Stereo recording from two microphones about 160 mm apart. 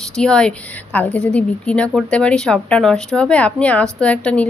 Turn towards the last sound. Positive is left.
turn(degrees=10)  # may be behind; listen again after turning